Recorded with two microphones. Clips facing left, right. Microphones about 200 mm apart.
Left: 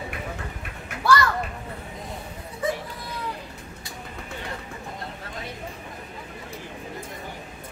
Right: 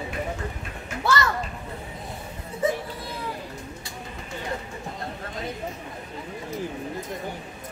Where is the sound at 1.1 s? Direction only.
25° right (ahead or behind).